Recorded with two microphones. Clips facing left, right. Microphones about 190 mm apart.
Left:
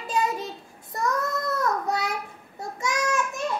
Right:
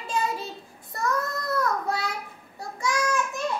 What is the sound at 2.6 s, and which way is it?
Child singing, 20° left (ahead or behind).